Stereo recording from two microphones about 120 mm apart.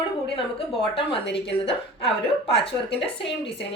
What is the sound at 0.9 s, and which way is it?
A woman's voice, 50° left (ahead or behind).